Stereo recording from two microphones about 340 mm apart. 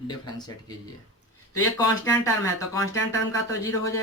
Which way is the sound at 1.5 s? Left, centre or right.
Centre.